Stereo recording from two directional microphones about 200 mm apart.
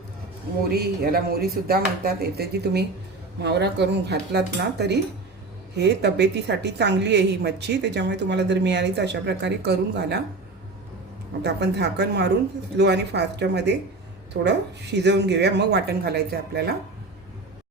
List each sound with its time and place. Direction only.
0.7 s a woman's voice: 50° right (ahead or behind)
11.4 s a woman's voice: 55° right (ahead or behind)